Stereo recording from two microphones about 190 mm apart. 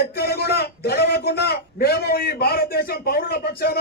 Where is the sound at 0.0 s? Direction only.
55° left (ahead or behind).